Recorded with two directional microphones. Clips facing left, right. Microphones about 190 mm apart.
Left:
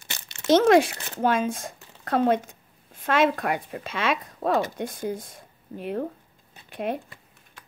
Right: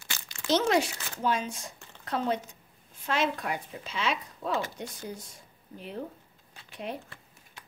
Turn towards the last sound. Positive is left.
turn(degrees=55)  # may be behind; listen again after turning